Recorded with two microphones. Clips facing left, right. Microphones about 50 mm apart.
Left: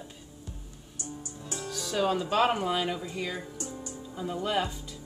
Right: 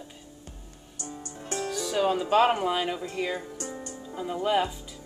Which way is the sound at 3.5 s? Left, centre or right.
Right.